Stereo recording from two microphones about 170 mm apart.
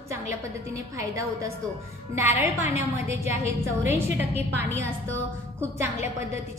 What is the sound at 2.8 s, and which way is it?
A woman's voice, 15° right (ahead or behind).